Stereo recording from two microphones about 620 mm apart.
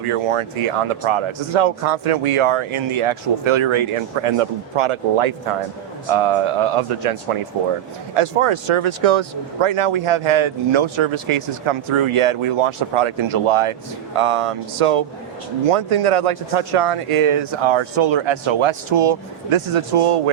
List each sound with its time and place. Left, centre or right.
0.1 s speech: right